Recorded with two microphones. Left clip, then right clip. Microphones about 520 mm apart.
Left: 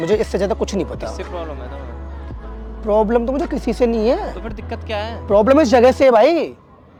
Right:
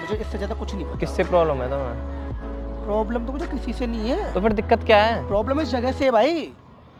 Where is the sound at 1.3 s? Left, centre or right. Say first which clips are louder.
Right 10 dB; right.